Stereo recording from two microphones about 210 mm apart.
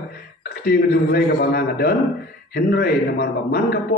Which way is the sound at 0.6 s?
45° left (ahead or behind).